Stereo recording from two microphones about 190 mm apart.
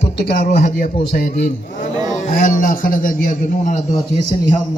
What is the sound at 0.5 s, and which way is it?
A man's voice, 45° left (ahead or behind).